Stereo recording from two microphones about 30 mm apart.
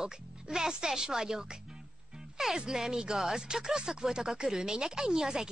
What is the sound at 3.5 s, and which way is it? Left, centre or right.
A woman's voice, right.